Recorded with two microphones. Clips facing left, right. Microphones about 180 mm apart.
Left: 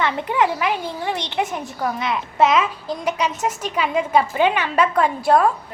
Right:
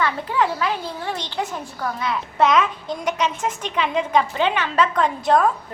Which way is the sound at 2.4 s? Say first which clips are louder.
Left 1 dB; 5° left (ahead or behind).